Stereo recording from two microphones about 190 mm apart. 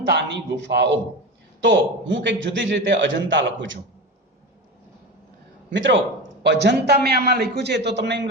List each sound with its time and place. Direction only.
0.1 s a man's voice: 65° right (ahead or behind)
5.7 s a man's voice: 75° right (ahead or behind)